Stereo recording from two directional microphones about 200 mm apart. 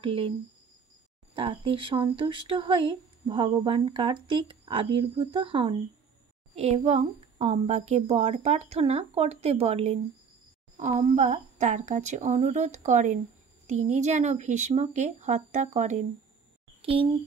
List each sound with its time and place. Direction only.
0.0 s speech: 30° right (ahead or behind)
1.3 s a child's voice: 25° right (ahead or behind)